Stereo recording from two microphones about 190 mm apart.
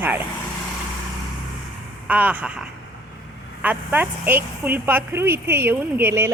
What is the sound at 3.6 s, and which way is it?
A woman's voice, 10° right (ahead or behind).